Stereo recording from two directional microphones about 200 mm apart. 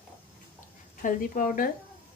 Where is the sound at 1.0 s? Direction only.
40° left (ahead or behind).